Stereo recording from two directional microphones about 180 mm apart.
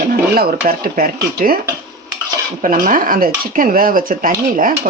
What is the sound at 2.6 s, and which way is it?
Speech, 50° right (ahead or behind).